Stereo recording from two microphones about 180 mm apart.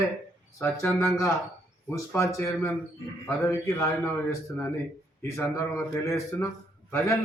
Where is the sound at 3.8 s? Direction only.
15° left (ahead or behind).